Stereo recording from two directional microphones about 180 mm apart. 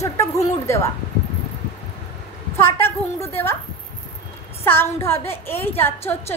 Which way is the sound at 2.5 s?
15° left (ahead or behind).